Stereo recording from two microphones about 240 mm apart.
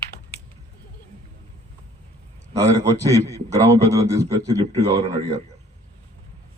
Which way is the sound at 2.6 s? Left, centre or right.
Centre.